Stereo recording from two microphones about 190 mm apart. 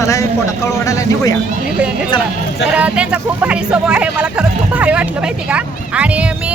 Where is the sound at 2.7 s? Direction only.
5° right (ahead or behind).